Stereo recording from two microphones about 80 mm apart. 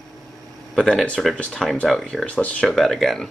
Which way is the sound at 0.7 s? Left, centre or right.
Centre.